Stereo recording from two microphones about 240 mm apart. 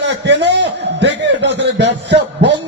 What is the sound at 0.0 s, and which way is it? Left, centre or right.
A man's voice, right.